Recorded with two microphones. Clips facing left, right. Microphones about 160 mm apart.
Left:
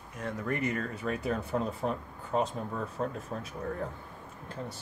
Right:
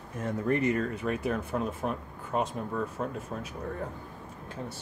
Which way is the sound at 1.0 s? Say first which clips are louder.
Right 2 dB; 15° right (ahead or behind).